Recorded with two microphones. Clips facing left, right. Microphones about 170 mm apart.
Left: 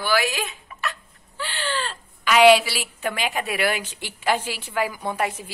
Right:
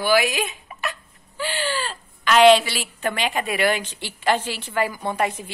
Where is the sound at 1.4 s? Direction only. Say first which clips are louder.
Right 3 dB; 15° right (ahead or behind).